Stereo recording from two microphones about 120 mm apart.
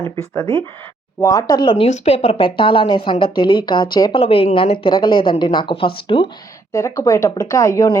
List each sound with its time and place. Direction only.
1.2 s speech: 30° left (ahead or behind)
1.8 s a woman's voice: 65° left (ahead or behind); by 6.2 s 45° left (ahead or behind)
6.7 s speech: 25° left (ahead or behind)